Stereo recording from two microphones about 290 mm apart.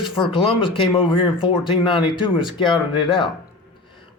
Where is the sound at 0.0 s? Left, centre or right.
Centre.